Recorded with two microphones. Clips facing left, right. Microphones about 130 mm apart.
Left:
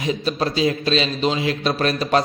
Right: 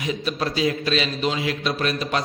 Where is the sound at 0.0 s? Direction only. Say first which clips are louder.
Left 3 dB; 30° left (ahead or behind).